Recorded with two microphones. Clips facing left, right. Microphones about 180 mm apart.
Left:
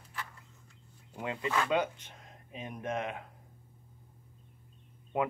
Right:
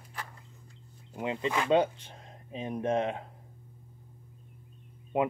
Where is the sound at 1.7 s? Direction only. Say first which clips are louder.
Right 6 dB; 30° right (ahead or behind).